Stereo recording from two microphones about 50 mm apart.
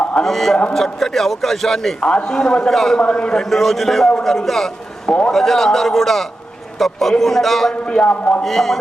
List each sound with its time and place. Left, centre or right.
0.2 s a man's voice: centre
2.0 s a man's voice: centre
3.0 s a man's voice: centre
7.9 s a man's voice: centre
8.4 s a man's voice: centre